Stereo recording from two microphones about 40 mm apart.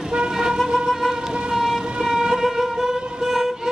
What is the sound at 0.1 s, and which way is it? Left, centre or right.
Vehicle, centre.